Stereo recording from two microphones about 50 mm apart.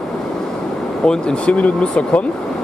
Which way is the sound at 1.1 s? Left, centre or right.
Centre.